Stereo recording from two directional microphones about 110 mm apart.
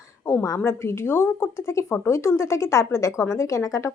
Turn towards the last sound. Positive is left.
turn(degrees=30)  # may be behind; listen again after turning